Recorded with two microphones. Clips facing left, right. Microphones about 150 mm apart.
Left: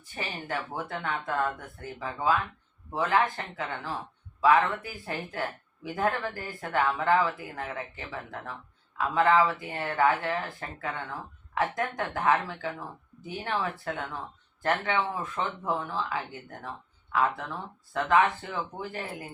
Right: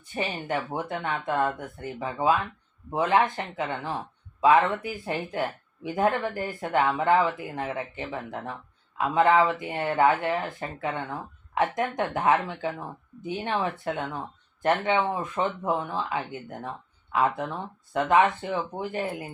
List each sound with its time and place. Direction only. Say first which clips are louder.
0.2 s speech: right 5 dB; 20° right (ahead or behind)